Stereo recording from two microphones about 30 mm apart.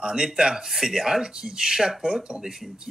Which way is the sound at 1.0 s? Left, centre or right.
Centre.